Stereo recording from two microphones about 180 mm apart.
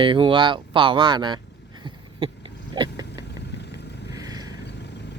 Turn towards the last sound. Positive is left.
turn(degrees=-20)  # may be behind; listen again after turning